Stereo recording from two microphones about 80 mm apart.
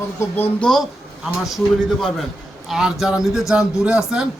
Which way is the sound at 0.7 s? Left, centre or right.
Centre.